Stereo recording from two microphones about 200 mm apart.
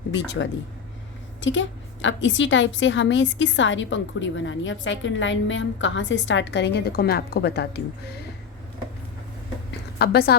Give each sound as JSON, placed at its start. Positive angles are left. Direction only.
{"t": 0.1, "sound": "a woman's voice", "side_deg": 65}
{"t": 10.0, "sound": "a woman's voice", "side_deg": 55}